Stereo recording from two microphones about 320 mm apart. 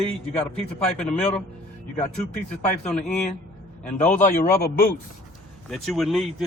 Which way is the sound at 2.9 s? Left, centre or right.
Centre.